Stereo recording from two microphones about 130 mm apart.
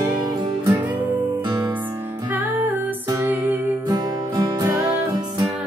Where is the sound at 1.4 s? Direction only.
30° right (ahead or behind).